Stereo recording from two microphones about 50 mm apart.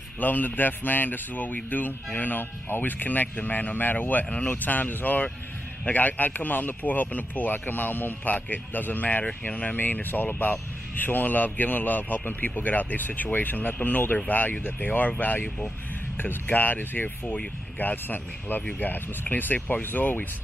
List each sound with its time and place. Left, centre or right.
0.2 s a man's voice: left
9.8 s a man's voice: left